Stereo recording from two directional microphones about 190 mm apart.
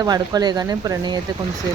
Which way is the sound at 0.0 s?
20° right (ahead or behind).